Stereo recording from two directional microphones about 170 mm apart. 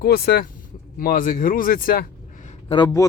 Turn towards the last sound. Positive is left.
turn(degrees=20)  # may be behind; listen again after turning